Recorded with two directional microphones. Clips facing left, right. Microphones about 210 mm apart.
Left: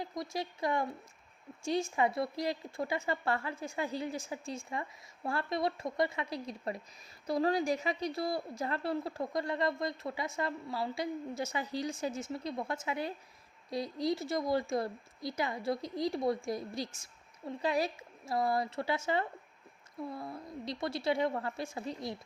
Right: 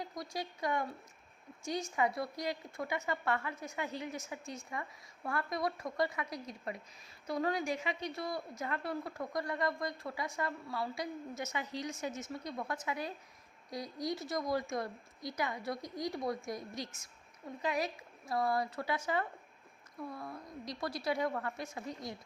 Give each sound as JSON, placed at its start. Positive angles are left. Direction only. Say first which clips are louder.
{"t": 0.0, "sound": "a woman's voice", "louder": "left 3 dB", "side_deg": 25}